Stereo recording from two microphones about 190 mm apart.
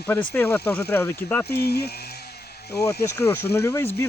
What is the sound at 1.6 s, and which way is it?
Speech, 55° left (ahead or behind).